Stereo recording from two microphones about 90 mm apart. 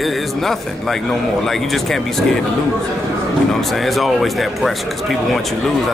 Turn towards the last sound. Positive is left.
turn(degrees=0)  # may be behind; listen again after turning